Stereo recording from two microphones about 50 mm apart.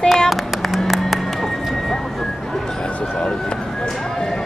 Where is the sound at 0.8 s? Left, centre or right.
Centre.